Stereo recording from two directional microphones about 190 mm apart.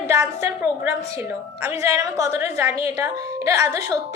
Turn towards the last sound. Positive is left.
turn(degrees=-15)  # may be behind; listen again after turning